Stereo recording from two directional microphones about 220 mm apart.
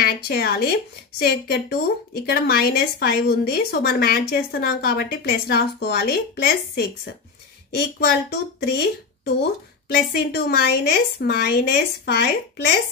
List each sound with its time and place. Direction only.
0.0 s a woman's voice: 45° left (ahead or behind)